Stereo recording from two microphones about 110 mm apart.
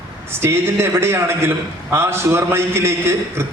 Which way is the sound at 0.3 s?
25° right (ahead or behind).